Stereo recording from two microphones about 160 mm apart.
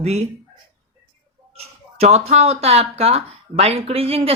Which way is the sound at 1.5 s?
40° right (ahead or behind).